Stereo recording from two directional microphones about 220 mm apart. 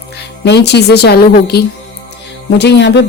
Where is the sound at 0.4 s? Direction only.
50° left (ahead or behind).